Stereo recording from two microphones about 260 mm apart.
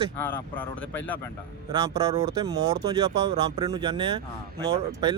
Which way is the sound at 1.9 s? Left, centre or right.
Centre.